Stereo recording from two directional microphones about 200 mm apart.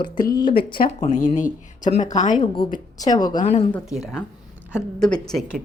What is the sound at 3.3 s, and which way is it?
Speech, 35° left (ahead or behind).